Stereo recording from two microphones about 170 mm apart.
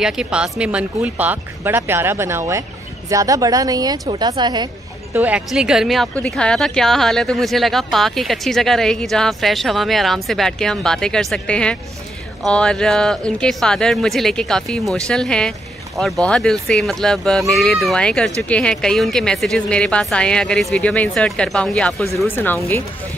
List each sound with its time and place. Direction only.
0.0 s speech: 5° right (ahead or behind); by 4.6 s 25° right (ahead or behind)
5.1 s speech: 10° right (ahead or behind); by 22.8 s 15° left (ahead or behind)